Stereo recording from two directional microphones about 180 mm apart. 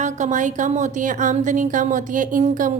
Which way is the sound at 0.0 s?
40° right (ahead or behind).